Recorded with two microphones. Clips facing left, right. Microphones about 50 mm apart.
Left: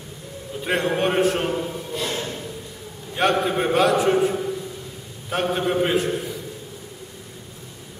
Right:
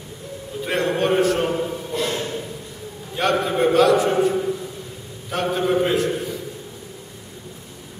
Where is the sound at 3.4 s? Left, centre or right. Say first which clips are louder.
Right 3 dB; centre.